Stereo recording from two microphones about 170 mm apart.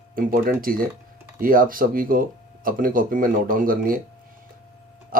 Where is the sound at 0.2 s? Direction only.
55° right (ahead or behind).